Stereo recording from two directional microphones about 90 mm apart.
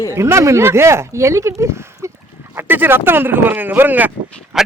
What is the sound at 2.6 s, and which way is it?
Speech, 25° right (ahead or behind).